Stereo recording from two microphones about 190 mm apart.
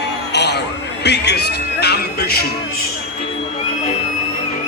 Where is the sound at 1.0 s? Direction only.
65° left (ahead or behind).